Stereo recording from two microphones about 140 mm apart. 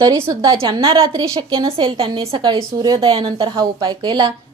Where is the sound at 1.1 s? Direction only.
25° right (ahead or behind).